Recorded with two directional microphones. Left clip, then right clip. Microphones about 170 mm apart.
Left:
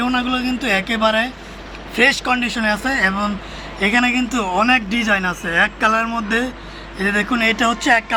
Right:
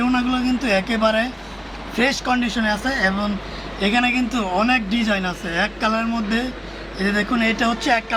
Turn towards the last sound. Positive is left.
turn(degrees=25)  # may be behind; listen again after turning